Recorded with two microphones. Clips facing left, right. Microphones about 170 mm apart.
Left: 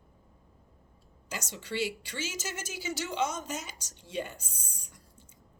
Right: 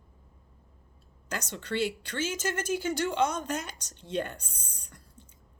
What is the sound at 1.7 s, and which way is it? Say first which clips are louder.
A woman's voice: right 3 dB; 60° right (ahead or behind).